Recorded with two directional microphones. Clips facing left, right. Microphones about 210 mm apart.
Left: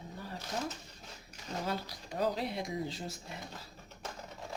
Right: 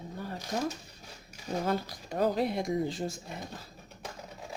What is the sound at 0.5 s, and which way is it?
Speech, 50° right (ahead or behind).